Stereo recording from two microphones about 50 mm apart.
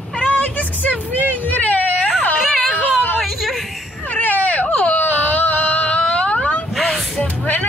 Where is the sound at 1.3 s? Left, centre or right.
Left.